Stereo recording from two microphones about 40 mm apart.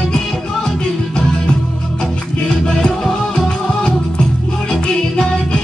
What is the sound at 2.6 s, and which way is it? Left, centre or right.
Music, left.